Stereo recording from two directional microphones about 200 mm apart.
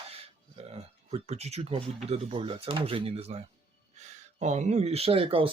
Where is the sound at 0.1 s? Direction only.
30° right (ahead or behind).